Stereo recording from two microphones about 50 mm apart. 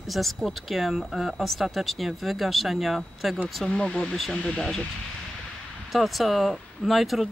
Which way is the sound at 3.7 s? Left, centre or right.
Centre.